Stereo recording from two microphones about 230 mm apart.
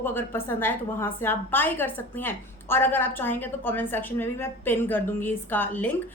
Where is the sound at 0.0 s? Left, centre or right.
Centre.